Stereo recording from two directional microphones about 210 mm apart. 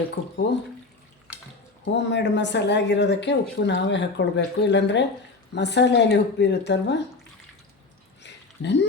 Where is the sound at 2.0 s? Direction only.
55° left (ahead or behind).